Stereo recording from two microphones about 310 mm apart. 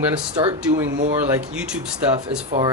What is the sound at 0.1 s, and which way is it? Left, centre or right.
Speech, centre.